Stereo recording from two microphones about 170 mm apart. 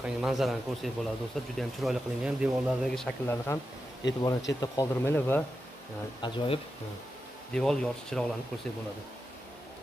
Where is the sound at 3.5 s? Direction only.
15° left (ahead or behind).